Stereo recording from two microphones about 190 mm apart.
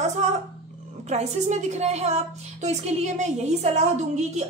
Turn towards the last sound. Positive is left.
turn(degrees=-35)  # may be behind; listen again after turning